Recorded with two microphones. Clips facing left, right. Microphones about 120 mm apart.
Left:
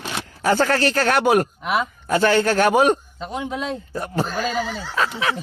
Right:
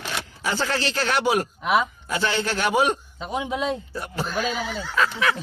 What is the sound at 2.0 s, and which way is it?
Speech, 50° left (ahead or behind).